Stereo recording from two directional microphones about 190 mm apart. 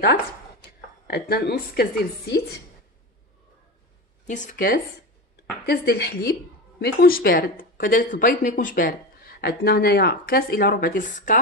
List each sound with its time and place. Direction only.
1.0 s a woman's voice: 55° left (ahead or behind)
4.3 s a woman's voice: 40° left (ahead or behind)